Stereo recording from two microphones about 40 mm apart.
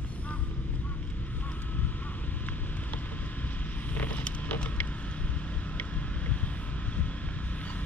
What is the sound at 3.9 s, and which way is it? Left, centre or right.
Vehicle, left.